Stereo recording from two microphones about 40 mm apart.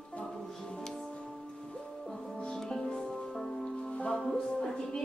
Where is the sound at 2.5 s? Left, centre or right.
Centre.